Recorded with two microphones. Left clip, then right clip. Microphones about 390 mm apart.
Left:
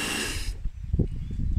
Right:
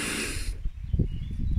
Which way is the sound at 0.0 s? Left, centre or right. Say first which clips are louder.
Left 2 dB; left.